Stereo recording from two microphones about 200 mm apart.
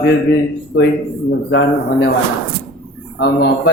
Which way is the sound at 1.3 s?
65° left (ahead or behind).